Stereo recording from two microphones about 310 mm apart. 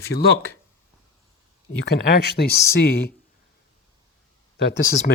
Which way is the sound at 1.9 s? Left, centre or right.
Left.